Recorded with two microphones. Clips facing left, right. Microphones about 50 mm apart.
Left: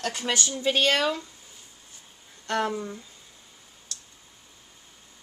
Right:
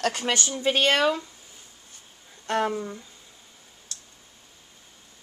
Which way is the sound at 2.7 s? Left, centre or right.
Centre.